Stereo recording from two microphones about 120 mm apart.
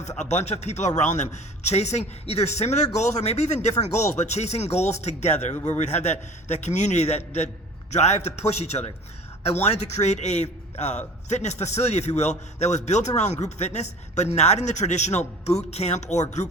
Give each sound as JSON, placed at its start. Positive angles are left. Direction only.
{"t": 0.2, "sound": "a man's voice", "side_deg": 70}